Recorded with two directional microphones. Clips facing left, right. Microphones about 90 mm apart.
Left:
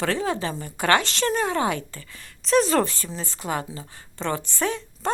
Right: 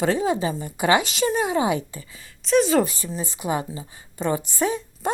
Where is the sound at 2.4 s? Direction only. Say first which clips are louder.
Right 1 dB; centre (ahead or behind).